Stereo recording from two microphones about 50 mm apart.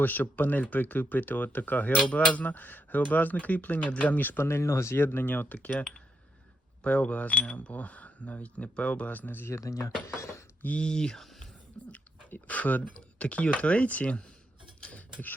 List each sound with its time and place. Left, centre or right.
0.0 s speech: left
4.4 s speech: left
4.9 s speech: left
6.8 s speech: left
9.5 s speech: left
10.2 s cutlery: left
10.8 s speech: centre
11.9 s chewing: left
13.0 s speech: left
14.8 s a sound: left